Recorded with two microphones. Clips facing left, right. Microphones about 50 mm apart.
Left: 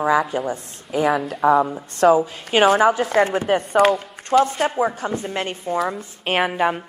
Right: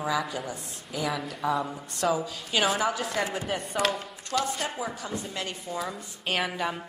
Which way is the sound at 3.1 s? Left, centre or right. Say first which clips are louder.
Left 12 dB; left.